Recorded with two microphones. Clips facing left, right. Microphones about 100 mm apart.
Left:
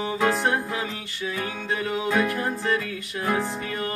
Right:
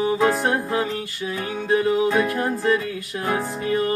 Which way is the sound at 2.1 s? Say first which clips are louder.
Right 3 dB; 5° right (ahead or behind).